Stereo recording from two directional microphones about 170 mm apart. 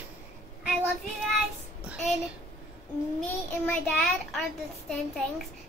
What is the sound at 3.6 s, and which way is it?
Speech, 5° left (ahead or behind).